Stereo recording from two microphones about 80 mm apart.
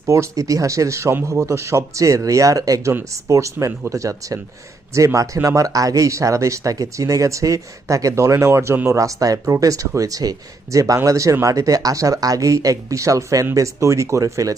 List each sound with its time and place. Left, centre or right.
0.0 s speech: right